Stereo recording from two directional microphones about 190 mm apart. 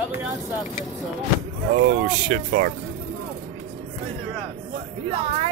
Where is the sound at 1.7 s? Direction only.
45° right (ahead or behind).